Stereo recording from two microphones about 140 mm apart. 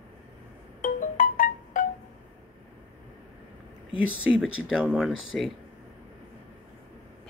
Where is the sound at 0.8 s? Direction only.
70° left (ahead or behind).